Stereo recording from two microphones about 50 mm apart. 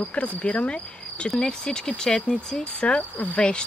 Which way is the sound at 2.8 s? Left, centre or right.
Left.